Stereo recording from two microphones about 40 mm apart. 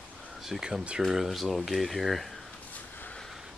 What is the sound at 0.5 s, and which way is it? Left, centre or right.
Speech, centre.